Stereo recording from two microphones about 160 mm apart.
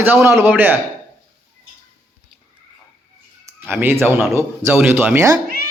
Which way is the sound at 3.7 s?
15° right (ahead or behind).